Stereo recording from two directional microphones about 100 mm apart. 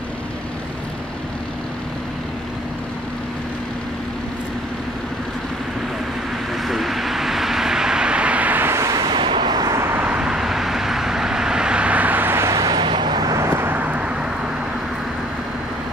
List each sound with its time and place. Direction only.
6.5 s vehicle: centre (ahead or behind); by 9.8 s 45° right (ahead or behind)
9.8 s vehicle: 25° right (ahead or behind)
10.0 s vehicle: 10° right (ahead or behind); by 12.7 s 30° right (ahead or behind)
12.7 s vehicle: 50° right (ahead or behind)
13.4 s vehicle: 20° right (ahead or behind)